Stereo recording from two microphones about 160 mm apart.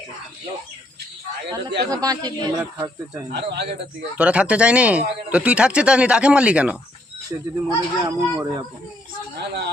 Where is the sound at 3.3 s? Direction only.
90° right.